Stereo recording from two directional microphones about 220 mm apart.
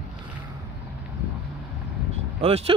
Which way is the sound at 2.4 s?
25° right (ahead or behind).